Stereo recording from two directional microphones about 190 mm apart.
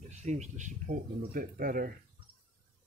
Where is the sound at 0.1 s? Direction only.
35° right (ahead or behind).